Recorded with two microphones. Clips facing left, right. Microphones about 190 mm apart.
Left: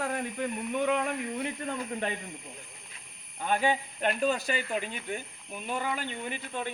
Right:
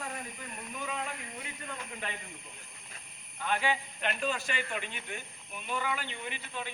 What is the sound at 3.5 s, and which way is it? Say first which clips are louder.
A man's voice: left 4 dB; 45° left (ahead or behind).